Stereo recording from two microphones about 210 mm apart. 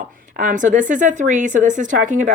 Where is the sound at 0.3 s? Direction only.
40° right (ahead or behind).